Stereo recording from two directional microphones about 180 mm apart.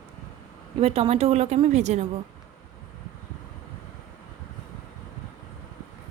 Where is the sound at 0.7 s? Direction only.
35° right (ahead or behind).